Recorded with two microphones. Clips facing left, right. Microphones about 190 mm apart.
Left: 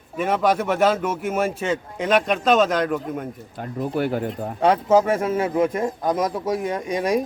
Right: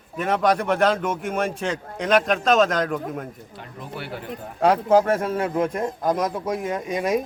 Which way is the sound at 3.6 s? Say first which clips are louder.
Left 12 dB; 45° left (ahead or behind).